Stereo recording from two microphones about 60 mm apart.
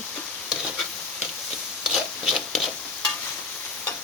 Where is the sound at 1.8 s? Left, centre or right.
Centre.